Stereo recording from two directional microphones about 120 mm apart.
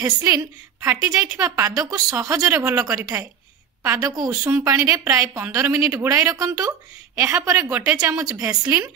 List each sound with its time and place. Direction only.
0.0 s a woman's voice: 30° right (ahead or behind)
4.1 s a woman's voice: 30° right (ahead or behind)